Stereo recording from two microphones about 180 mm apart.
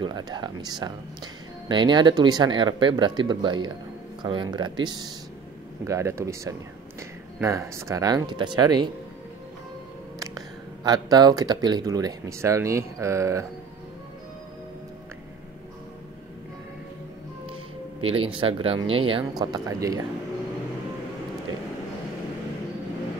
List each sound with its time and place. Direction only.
0.0 s speech: 25° right (ahead or behind)
10.1 s speech: 20° right (ahead or behind)
18.0 s speech: 30° right (ahead or behind)